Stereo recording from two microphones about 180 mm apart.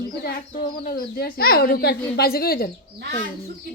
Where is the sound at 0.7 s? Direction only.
55° left (ahead or behind).